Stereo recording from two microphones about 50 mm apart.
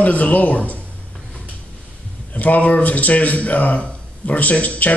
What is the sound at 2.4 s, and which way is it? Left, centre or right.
A man's voice, left.